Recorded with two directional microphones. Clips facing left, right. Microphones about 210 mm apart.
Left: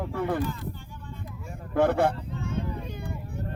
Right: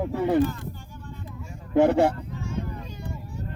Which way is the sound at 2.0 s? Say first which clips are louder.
Right 2 dB; 55° left (ahead or behind).